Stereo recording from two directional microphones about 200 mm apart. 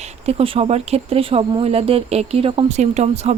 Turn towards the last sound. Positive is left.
turn(degrees=-35)  # may be behind; listen again after turning